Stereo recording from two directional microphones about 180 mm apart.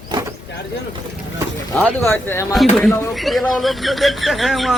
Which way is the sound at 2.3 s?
15° left (ahead or behind).